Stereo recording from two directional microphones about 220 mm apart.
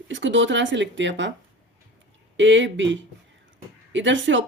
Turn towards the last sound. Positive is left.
turn(degrees=-55)  # may be behind; listen again after turning